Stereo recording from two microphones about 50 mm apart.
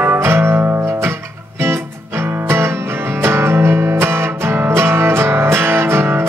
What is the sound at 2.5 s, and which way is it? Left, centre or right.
Music, right.